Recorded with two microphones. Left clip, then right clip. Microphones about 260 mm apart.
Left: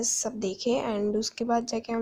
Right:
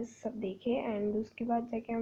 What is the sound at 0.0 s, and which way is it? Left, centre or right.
A woman's voice, left.